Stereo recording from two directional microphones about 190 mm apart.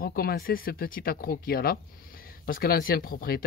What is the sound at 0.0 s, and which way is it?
Speech, 50° left (ahead or behind).